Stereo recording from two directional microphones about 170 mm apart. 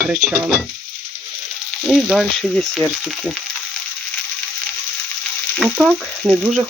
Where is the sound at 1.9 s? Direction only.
Centre (ahead or behind).